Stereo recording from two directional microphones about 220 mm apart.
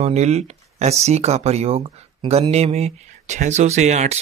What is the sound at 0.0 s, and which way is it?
Speech, 30° right (ahead or behind).